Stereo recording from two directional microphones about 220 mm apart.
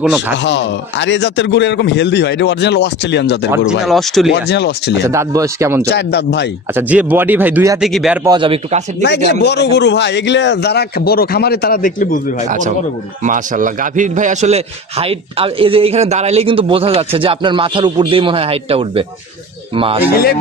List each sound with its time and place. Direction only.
0.4 s a man's voice: 55° left (ahead or behind)
3.8 s speech: centre (ahead or behind)
4.3 s a man's voice: 50° left (ahead or behind)
5.0 s speech: 15° right (ahead or behind)
5.9 s a man's voice: 50° left (ahead or behind)
6.7 s speech: 5° right (ahead or behind)
8.2 s a man's voice: 20° right (ahead or behind)
9.0 s a man's voice: 50° left (ahead or behind)
12.4 s a man's voice: 35° right (ahead or behind)